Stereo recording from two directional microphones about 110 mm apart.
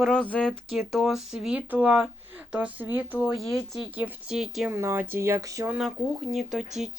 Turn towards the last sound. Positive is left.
turn(degrees=-5)  # may be behind; listen again after turning